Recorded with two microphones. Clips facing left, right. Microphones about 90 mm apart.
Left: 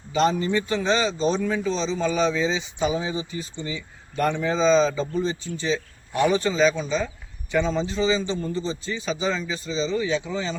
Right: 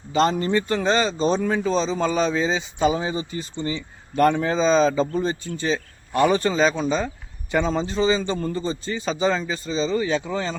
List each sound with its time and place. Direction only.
0.2 s speech: 45° right (ahead or behind)